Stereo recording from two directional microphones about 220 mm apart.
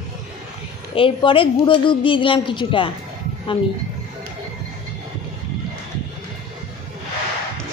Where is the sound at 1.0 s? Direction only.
25° left (ahead or behind).